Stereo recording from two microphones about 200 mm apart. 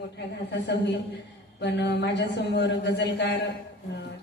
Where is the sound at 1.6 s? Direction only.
60° left (ahead or behind).